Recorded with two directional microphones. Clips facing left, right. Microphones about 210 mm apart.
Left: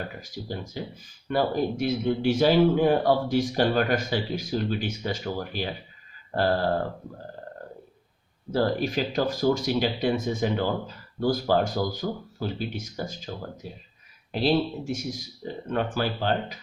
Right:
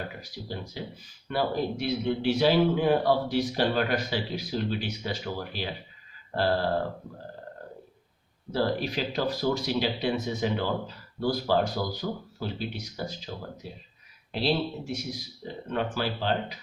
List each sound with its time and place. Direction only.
0.2 s a man's voice: 45° left (ahead or behind)
8.5 s a man's voice: 45° left (ahead or behind)